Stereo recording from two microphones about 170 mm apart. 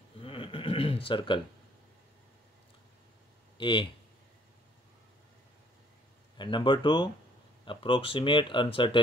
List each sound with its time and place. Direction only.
0.2 s a sound: 30° left (ahead or behind)
3.5 s speech: 30° left (ahead or behind)
6.3 s speech: 25° left (ahead or behind)